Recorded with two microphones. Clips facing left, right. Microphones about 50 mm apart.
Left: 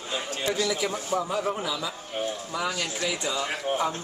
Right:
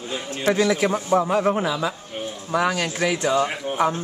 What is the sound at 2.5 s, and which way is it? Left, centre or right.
Speech, right.